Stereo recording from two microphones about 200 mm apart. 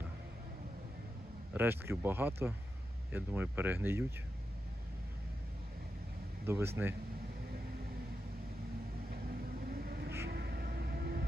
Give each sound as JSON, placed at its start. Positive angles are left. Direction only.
{"t": 1.5, "sound": "speech", "side_deg": -10}
{"t": 6.5, "sound": "speech", "side_deg": -10}
{"t": 9.6, "sound": "vehicle", "side_deg": -45}
{"t": 10.2, "sound": "music", "side_deg": -55}